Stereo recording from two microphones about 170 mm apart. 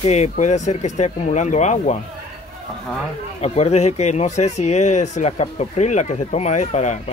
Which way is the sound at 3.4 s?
40° left (ahead or behind).